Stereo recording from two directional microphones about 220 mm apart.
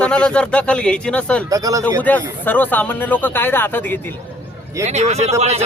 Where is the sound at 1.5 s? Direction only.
15° right (ahead or behind).